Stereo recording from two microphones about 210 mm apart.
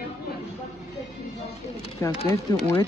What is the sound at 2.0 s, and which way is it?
Speech, 15° left (ahead or behind).